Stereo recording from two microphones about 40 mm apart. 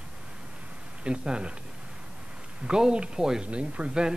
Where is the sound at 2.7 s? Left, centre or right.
Right.